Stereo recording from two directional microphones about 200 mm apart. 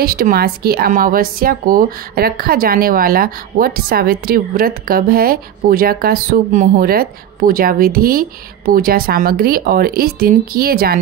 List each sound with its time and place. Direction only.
0.0 s speech: 50° right (ahead or behind)